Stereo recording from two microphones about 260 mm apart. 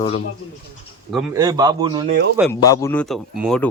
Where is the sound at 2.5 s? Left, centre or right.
Centre.